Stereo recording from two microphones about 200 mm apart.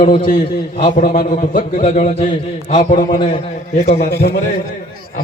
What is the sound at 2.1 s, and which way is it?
Speech, 30° left (ahead or behind).